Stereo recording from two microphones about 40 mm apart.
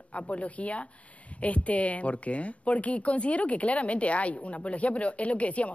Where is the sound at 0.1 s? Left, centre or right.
Left.